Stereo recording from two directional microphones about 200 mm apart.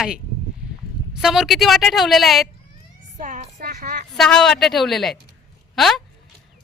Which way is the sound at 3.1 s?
40° right (ahead or behind).